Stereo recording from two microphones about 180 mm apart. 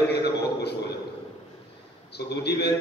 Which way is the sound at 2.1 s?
65° left (ahead or behind).